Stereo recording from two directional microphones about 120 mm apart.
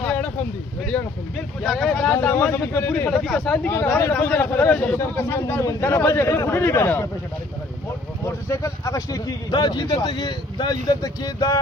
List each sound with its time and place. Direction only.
0.0 s a sound: 10° left (ahead or behind)
0.8 s vehicle: 5° left (ahead or behind)
2.1 s speech: 15° left (ahead or behind)
3.1 s speech: 5° left (ahead or behind)
3.7 s speech: 25° left (ahead or behind)
4.1 s speech: 10° left (ahead or behind)
8.4 s speech: 25° left (ahead or behind)